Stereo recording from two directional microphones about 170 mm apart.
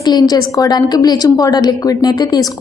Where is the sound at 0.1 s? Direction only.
25° left (ahead or behind).